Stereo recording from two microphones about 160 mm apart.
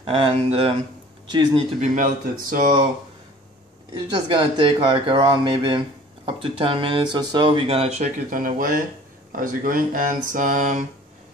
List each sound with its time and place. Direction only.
0.0 s speech: 35° right (ahead or behind)
1.3 s speech: 25° right (ahead or behind)
1.8 s speech: 55° right (ahead or behind)
4.1 s speech: 30° right (ahead or behind)
8.3 s speech: 60° right (ahead or behind)